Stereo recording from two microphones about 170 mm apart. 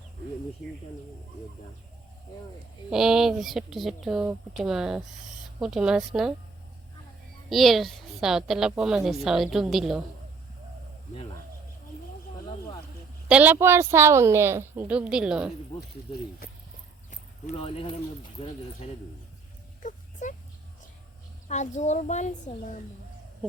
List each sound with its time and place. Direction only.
2.9 s a woman's voice: 5° right (ahead or behind)
7.5 s a woman's voice: centre (ahead or behind)
13.2 s a woman's voice: 10° right (ahead or behind)
15.7 s speech: 35° left (ahead or behind)
17.6 s speech: 35° left (ahead or behind)
19.8 s a sound: 45° left (ahead or behind)
21.4 s speech: 45° left (ahead or behind)